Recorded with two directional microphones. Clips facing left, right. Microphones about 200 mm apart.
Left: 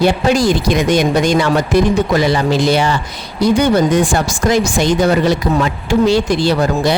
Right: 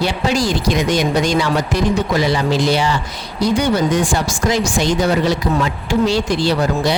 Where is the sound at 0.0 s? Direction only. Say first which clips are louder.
Left 5 dB; 50° left (ahead or behind).